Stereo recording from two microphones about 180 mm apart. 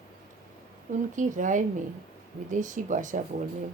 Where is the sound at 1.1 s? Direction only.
45° right (ahead or behind).